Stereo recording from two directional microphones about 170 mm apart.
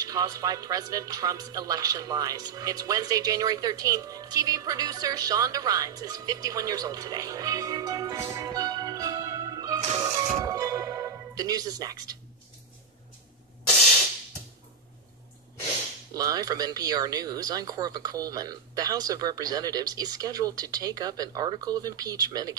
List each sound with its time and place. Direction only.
0.0 s speech: 20° right (ahead or behind)
8.2 s music: 20° right (ahead or behind)
16.2 s speech: 20° right (ahead or behind)